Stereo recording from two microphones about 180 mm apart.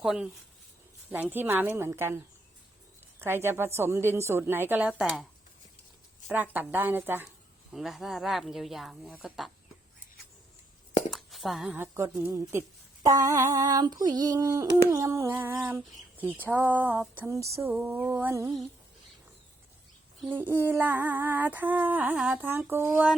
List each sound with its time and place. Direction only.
0.0 s a woman's voice: centre (ahead or behind)
6.2 s a woman's voice: 10° right (ahead or behind)
11.1 s a woman's voice: centre (ahead or behind); by 18.6 s 15° right (ahead or behind)
20.2 s a woman's voice: 10° right (ahead or behind)
22.9 s speech: centre (ahead or behind)